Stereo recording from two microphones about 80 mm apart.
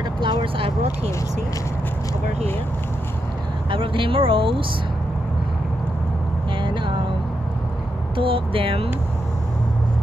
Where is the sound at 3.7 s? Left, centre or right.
Right.